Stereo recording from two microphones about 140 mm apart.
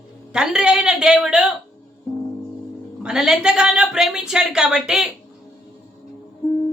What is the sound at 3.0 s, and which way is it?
A woman's voice, 5° right (ahead or behind).